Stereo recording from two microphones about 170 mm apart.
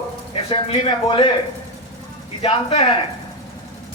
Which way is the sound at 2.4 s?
35° left (ahead or behind).